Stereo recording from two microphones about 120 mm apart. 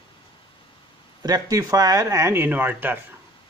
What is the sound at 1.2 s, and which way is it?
Speech, 30° right (ahead or behind).